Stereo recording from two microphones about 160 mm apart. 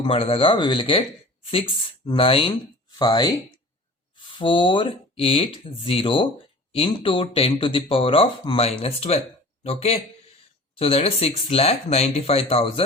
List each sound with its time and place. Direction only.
0.0 s speech: 35° left (ahead or behind)
4.4 s speech: 30° left (ahead or behind)